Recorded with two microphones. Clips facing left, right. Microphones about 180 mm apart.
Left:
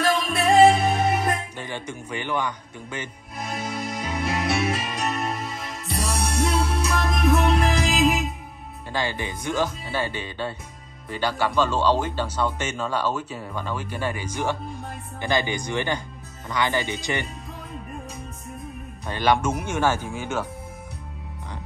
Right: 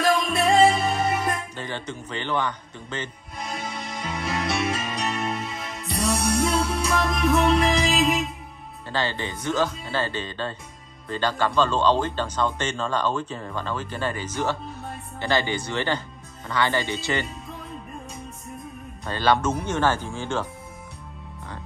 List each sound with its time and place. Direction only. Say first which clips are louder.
0.0 s music: right 1 dB; centre (ahead or behind)
1.6 s music: even; 10° left (ahead or behind)
8.9 s speech: even; 15° left (ahead or behind)
19.0 s speech: even; 15° left (ahead or behind)